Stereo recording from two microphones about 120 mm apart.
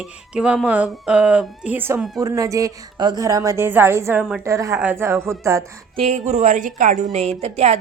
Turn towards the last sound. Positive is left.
turn(degrees=-65)  # may be behind; listen again after turning